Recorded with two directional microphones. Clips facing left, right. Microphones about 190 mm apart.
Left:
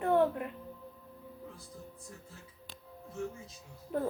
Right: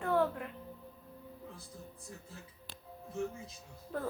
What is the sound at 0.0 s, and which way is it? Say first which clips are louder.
Music: left 4 dB; 20° left (ahead or behind).